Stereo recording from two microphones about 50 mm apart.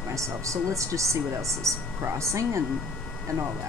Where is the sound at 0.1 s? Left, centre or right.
Right.